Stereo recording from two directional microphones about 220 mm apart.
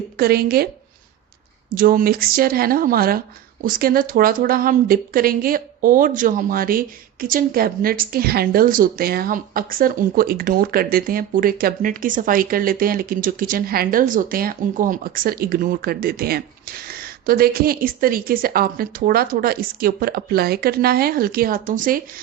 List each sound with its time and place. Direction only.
0.2 s speech: 45° right (ahead or behind)
1.7 s speech: 40° right (ahead or behind)